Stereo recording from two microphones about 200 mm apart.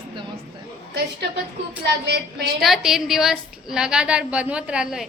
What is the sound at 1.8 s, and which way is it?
Speech, 60° right (ahead or behind).